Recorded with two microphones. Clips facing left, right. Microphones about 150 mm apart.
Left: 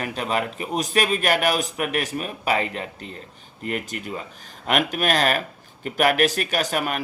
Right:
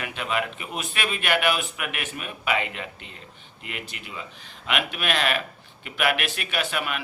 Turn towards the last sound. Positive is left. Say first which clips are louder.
# left 4 dB
turn(degrees=40)  # may be behind; listen again after turning